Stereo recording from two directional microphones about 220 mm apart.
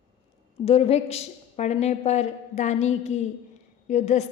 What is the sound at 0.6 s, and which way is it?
A woman's voice, 25° left (ahead or behind).